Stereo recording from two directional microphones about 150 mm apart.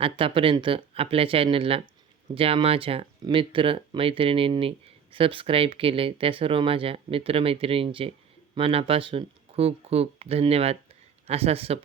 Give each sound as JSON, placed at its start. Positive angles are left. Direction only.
{"t": 0.0, "sound": "speech", "side_deg": -35}